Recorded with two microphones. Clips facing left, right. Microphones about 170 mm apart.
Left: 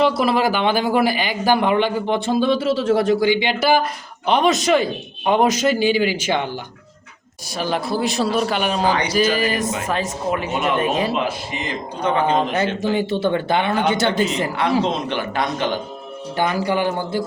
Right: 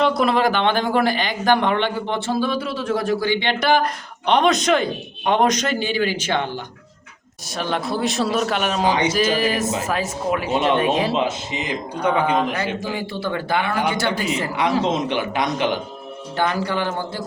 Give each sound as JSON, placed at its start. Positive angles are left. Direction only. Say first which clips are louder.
{"t": 0.2, "sound": "a man's voice", "louder": "even", "side_deg": 5}
{"t": 3.2, "sound": "a man's voice", "louder": "left 3 dB", "side_deg": 15}
{"t": 8.9, "sound": "speech", "louder": "right 1 dB", "side_deg": -25}
{"t": 9.1, "sound": "speech", "louder": "left 1 dB", "side_deg": 0}
{"t": 11.1, "sound": "a man's voice", "louder": "right 1 dB", "side_deg": -20}
{"t": 12.3, "sound": "a man's voice", "louder": "left 2 dB", "side_deg": 25}
{"t": 14.5, "sound": "a man's voice", "louder": "even", "side_deg": -15}
{"t": 16.4, "sound": "a man's voice", "louder": "left 2 dB", "side_deg": 15}